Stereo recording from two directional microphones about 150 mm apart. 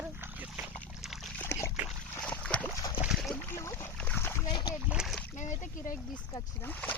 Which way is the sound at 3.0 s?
Centre (ahead or behind).